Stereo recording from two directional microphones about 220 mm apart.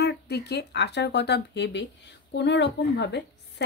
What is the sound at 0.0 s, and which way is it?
Speech, 50° left (ahead or behind).